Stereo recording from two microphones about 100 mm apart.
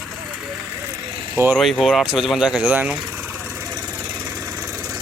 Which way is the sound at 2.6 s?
20° right (ahead or behind).